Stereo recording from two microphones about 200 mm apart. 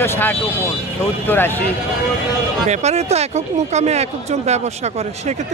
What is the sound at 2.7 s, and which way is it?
Speech, 35° right (ahead or behind).